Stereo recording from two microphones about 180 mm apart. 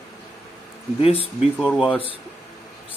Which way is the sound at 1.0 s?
35° left (ahead or behind).